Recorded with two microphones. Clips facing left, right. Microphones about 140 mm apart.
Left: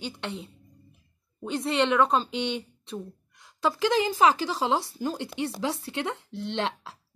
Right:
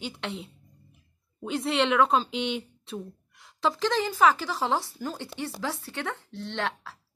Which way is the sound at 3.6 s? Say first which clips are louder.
Left 2 dB; 10° left (ahead or behind).